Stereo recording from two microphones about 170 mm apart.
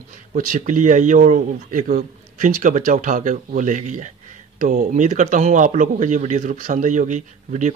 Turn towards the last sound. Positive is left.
turn(degrees=-45)  # may be behind; listen again after turning